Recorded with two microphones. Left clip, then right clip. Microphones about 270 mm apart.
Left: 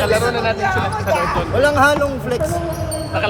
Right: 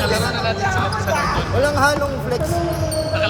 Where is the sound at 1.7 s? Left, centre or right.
Left.